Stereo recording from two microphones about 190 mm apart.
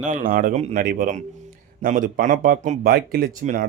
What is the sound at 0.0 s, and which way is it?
Speech, 45° right (ahead or behind).